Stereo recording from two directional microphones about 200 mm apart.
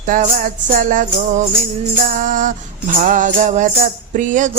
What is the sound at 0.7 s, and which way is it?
Mantra, 40° right (ahead or behind).